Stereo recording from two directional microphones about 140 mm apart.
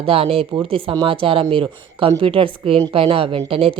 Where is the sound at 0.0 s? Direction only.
45° right (ahead or behind).